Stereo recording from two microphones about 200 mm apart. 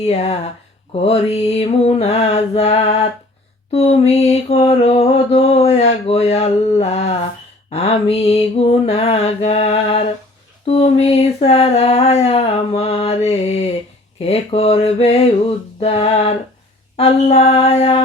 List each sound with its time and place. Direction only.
0.0 s mantra: 30° left (ahead or behind)
10.7 s a sound: 30° left (ahead or behind)
14.2 s mantra: 30° left (ahead or behind)